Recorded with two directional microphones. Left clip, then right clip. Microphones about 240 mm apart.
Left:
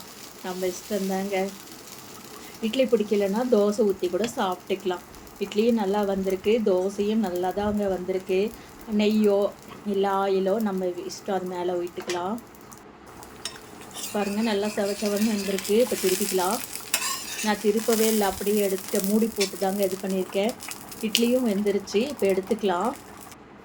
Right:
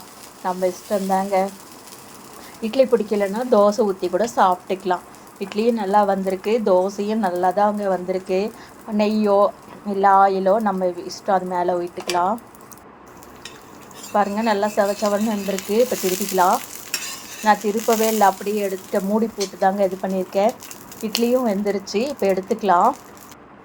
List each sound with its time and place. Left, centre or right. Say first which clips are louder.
0.4 s speech: right 8 dB; centre
2.6 s speech: right 5 dB; centre
14.1 s speech: right 8 dB; centre